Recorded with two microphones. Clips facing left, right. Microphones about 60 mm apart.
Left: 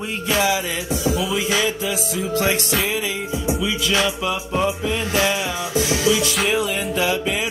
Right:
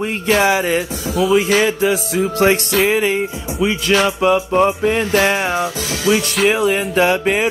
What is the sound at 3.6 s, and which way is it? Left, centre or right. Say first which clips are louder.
Music: right 8 dB; right.